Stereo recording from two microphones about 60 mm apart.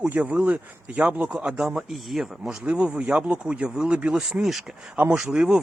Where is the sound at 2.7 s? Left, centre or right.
Centre.